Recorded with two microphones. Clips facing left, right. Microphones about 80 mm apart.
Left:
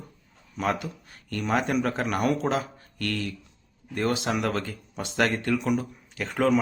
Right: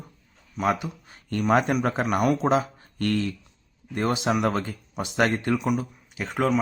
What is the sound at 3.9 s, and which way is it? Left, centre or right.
Speech, right.